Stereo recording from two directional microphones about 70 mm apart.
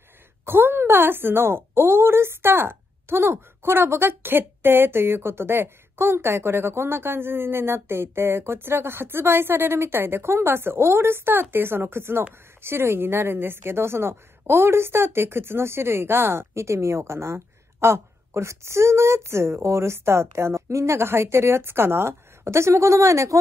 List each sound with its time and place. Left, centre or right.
0.5 s a woman's voice: right